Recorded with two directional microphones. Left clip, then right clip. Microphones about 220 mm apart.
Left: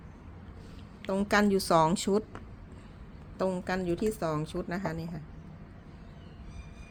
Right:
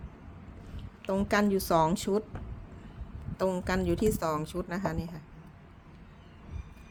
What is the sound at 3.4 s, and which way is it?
A woman's voice, 10° right (ahead or behind).